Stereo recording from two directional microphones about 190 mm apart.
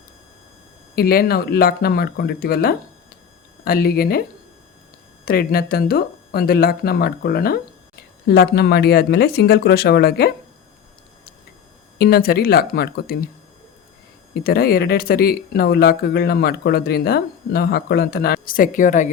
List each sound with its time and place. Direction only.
0.9 s speech: 50° left (ahead or behind)
5.2 s speech: 50° left (ahead or behind)
11.9 s speech: 55° left (ahead or behind)
14.4 s speech: 55° left (ahead or behind)